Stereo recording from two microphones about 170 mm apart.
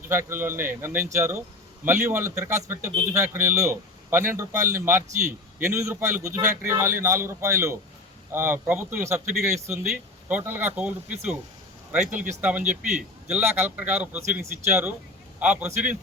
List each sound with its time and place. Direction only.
0.1 s speech: 15° right (ahead or behind)